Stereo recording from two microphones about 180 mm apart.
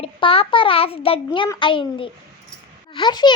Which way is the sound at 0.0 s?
30° left (ahead or behind).